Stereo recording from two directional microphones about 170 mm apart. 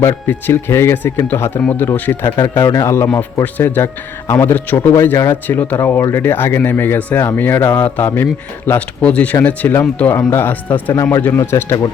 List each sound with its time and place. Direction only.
0.0 s speech: 15° left (ahead or behind)